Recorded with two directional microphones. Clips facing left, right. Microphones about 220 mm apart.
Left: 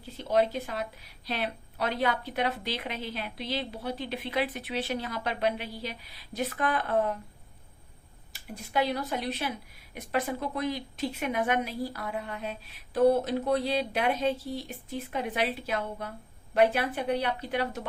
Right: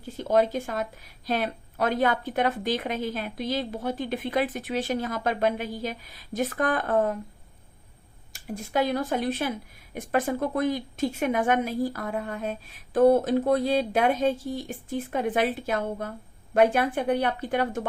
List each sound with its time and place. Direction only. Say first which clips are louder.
0.0 s speech: right 3 dB; 50° right (ahead or behind)
8.3 s speech: right 5 dB; 45° right (ahead or behind)